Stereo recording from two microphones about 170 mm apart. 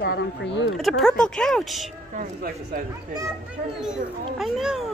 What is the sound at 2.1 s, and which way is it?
Speech, 55° right (ahead or behind).